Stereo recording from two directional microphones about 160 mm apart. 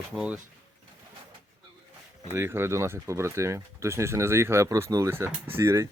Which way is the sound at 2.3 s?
15° right (ahead or behind).